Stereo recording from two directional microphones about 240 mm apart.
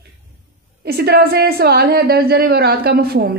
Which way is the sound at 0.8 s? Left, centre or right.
Right.